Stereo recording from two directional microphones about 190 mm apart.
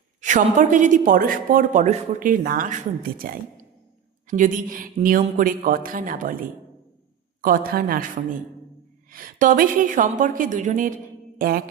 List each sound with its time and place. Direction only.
0.2 s a woman's voice: 40° right (ahead or behind)
7.4 s a woman's voice: 50° right (ahead or behind)